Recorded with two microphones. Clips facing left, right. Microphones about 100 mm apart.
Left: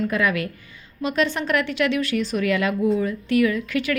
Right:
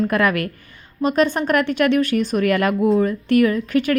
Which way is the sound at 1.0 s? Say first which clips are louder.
Right 5 dB; 45° right (ahead or behind).